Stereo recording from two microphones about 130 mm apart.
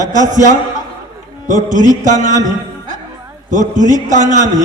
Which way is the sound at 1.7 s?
70° right (ahead or behind).